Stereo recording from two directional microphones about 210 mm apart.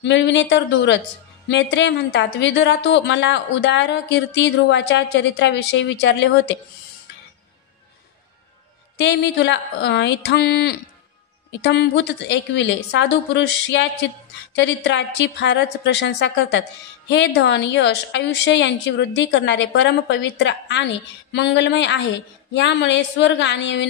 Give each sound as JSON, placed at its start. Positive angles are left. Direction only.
{"t": 0.0, "sound": "a woman's voice", "side_deg": 60}
{"t": 8.9, "sound": "a woman's voice", "side_deg": 55}